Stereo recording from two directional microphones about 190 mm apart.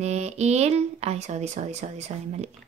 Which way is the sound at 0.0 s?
35° right (ahead or behind).